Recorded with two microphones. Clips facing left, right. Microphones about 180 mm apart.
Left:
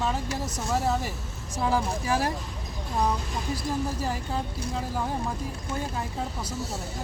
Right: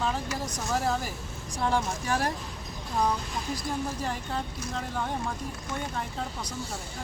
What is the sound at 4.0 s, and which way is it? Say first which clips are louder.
Speech: left 2 dB; 5° left (ahead or behind).